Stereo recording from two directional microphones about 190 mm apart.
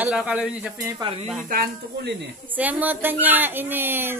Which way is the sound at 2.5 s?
10° right (ahead or behind).